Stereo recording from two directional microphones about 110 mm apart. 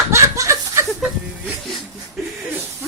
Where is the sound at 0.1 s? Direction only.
25° right (ahead or behind).